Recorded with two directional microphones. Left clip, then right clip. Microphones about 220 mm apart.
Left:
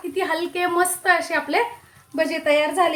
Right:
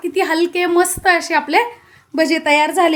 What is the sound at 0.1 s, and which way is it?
A woman's voice, 45° right (ahead or behind).